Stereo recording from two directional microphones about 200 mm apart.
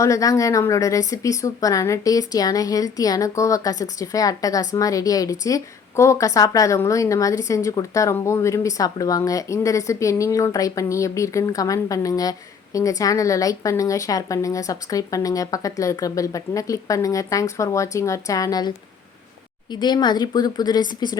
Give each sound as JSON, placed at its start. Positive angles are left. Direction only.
{"t": 0.0, "sound": "a woman's voice", "side_deg": 15}
{"t": 19.7, "sound": "speech", "side_deg": 20}